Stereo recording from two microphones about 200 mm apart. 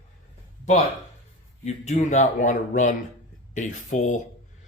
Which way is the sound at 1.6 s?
35° left (ahead or behind).